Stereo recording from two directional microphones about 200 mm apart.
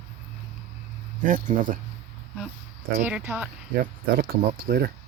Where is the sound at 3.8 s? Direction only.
45° right (ahead or behind).